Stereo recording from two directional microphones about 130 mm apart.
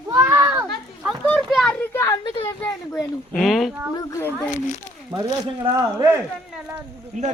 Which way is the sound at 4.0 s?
20° left (ahead or behind).